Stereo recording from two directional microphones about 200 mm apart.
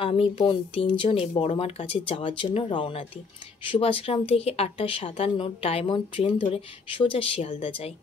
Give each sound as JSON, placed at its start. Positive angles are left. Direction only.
{"t": 0.0, "sound": "a woman's voice", "side_deg": 25}